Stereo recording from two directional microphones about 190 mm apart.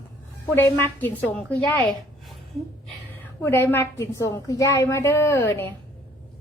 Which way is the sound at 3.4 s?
10° left (ahead or behind).